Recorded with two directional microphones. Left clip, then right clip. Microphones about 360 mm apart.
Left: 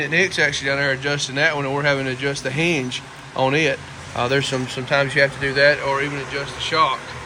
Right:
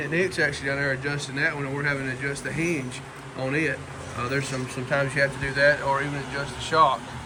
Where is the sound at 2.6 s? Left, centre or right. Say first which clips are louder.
Left 7 dB; centre.